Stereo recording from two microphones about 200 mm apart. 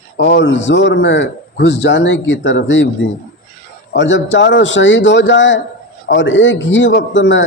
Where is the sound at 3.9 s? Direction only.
65° left (ahead or behind).